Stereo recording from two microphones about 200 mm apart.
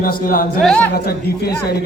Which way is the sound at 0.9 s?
50° left (ahead or behind).